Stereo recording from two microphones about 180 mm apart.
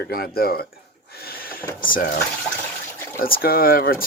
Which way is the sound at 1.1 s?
55° left (ahead or behind).